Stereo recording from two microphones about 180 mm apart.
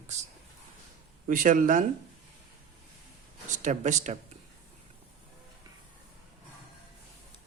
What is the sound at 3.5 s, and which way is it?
Speech, 45° right (ahead or behind).